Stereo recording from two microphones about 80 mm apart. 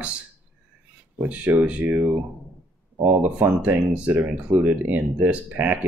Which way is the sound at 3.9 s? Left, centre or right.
Centre.